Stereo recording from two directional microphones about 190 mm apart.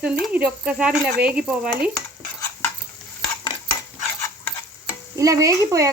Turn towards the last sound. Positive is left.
turn(degrees=-15)  # may be behind; listen again after turning